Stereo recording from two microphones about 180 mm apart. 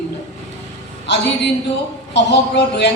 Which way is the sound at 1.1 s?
70° left (ahead or behind).